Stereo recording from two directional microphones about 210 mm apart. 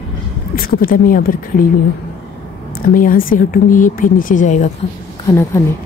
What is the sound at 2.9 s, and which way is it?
Speech, 40° left (ahead or behind).